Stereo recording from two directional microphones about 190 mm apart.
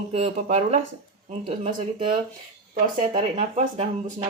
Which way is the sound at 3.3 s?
35° right (ahead or behind).